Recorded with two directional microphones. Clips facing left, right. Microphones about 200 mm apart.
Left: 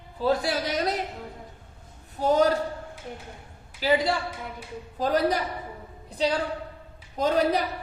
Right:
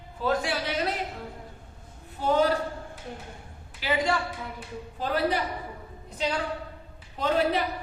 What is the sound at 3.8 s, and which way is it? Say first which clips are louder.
A man's voice: left 3 dB; 35° left (ahead or behind).